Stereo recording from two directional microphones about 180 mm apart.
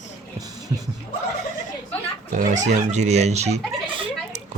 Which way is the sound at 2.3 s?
45° right (ahead or behind).